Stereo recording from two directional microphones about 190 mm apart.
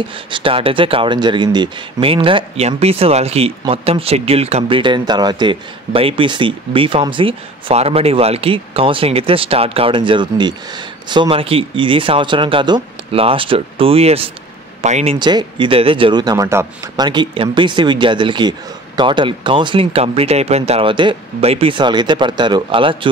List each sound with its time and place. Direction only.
0.3 s speech: 30° right (ahead or behind)
15.1 s speech: 25° right (ahead or behind)